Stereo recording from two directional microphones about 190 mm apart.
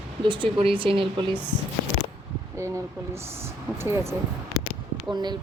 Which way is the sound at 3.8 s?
15° right (ahead or behind).